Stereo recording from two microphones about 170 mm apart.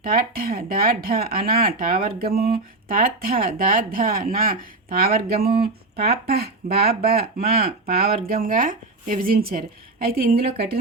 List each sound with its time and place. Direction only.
0.1 s speech: 60° right (ahead or behind)